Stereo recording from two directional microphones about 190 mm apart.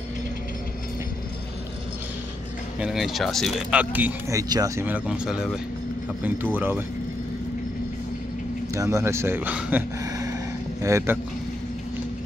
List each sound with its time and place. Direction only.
2.8 s speech: centre (ahead or behind)
3.9 s speech: 15° right (ahead or behind)
8.7 s speech: 15° right (ahead or behind)
10.0 s a sound: 20° right (ahead or behind)
10.8 s speech: 15° right (ahead or behind)